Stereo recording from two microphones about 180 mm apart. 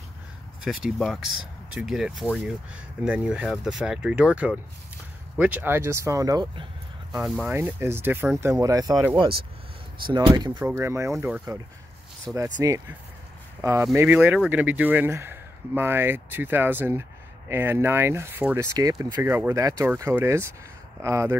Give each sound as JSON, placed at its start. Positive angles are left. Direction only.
{"t": 0.7, "sound": "speech", "side_deg": 0}
{"t": 7.2, "sound": "speech", "side_deg": 0}
{"t": 7.5, "sound": "speech", "side_deg": -15}
{"t": 10.1, "sound": "speech", "side_deg": -25}